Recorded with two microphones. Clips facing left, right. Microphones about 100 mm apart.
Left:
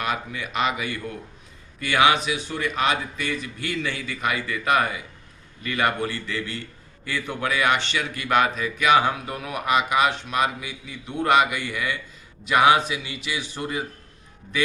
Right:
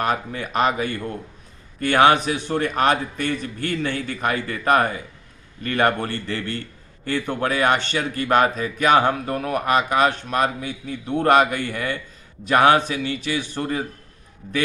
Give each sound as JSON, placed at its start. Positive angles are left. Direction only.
{"t": 0.0, "sound": "a man's voice", "side_deg": -40}